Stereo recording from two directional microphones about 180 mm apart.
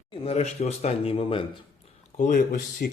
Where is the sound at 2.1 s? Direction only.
45° left (ahead or behind).